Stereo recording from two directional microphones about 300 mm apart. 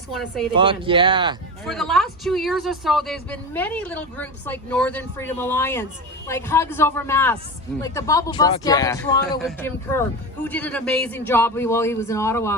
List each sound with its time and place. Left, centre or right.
0.1 s speech: centre
0.5 s speech: centre
1.6 s a man's voice: centre